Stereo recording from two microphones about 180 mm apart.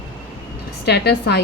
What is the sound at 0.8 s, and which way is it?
Speech, 65° left (ahead or behind).